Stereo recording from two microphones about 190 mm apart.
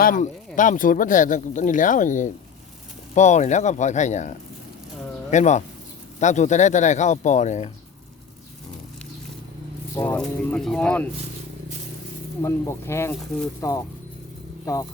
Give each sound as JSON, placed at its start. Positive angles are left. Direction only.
{"t": 0.0, "sound": "speech", "side_deg": 45}
{"t": 9.9, "sound": "a sound", "side_deg": 15}
{"t": 10.2, "sound": "speech", "side_deg": 5}
{"t": 12.4, "sound": "speech", "side_deg": 15}